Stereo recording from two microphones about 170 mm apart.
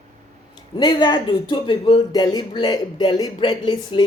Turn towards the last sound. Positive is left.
turn(degrees=25)  # may be behind; listen again after turning